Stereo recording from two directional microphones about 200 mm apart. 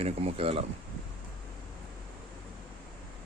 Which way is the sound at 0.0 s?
30° right (ahead or behind).